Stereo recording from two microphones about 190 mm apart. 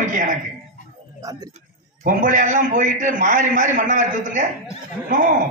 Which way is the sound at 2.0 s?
45° right (ahead or behind).